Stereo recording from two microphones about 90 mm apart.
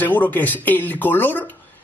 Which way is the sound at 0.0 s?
20° left (ahead or behind).